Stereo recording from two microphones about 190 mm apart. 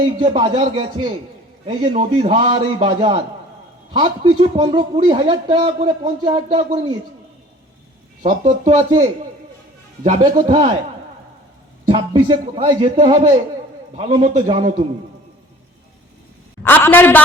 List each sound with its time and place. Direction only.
0.2 s a man's voice: 30° right (ahead or behind)
8.2 s a man's voice: 40° right (ahead or behind)
10.0 s a man's voice: 40° right (ahead or behind)
11.9 s a man's voice: 25° right (ahead or behind)
16.6 s a woman's voice: 10° left (ahead or behind)